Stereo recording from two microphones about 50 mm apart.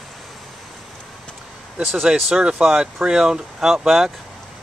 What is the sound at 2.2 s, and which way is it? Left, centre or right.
Speech, centre.